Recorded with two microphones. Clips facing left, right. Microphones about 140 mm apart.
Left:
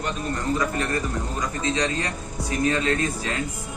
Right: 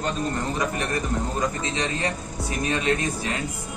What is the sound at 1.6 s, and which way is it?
A man's voice, 25° right (ahead or behind).